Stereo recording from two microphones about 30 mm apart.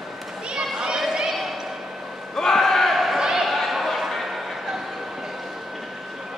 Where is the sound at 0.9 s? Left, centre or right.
Centre.